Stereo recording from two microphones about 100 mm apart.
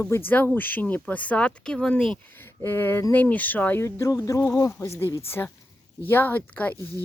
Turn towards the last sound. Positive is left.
turn(degrees=15)  # may be behind; listen again after turning